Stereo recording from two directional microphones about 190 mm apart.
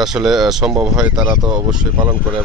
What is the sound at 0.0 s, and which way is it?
Speech, centre (ahead or behind).